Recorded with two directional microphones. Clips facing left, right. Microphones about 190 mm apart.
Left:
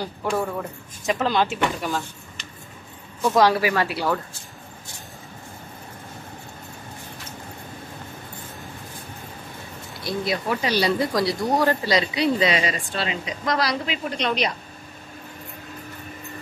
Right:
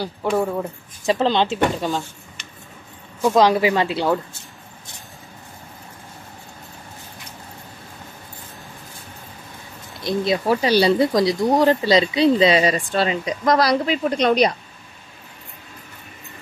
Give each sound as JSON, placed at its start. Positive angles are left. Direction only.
{"t": 0.0, "sound": "speech", "side_deg": -10}
{"t": 1.0, "sound": "speech", "side_deg": -25}
{"t": 3.2, "sound": "speech", "side_deg": -15}
{"t": 10.0, "sound": "speech", "side_deg": -25}
{"t": 12.5, "sound": "speech", "side_deg": -40}